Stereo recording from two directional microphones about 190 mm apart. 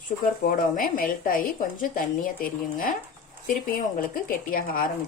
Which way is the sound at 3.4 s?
45° left (ahead or behind).